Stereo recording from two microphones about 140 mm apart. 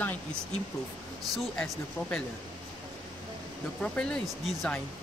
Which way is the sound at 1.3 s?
5° left (ahead or behind).